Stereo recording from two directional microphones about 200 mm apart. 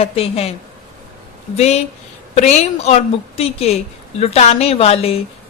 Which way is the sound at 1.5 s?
30° left (ahead or behind).